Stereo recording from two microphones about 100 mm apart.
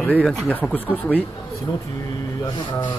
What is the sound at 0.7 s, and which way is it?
Speech, 15° left (ahead or behind).